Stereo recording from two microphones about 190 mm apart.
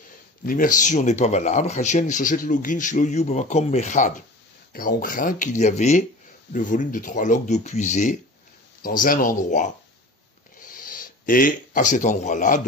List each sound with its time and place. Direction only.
0.5 s a man's voice: 45° left (ahead or behind)